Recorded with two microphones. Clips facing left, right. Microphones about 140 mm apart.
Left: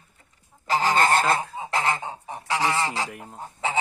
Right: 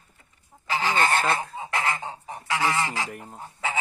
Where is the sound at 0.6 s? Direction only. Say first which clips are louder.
Left 3 dB; 40° left (ahead or behind).